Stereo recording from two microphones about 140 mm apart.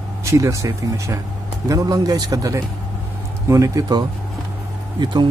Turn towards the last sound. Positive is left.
turn(degrees=-30)  # may be behind; listen again after turning